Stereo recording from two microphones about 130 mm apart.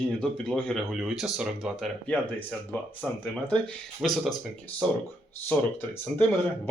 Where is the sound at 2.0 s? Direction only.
10° left (ahead or behind).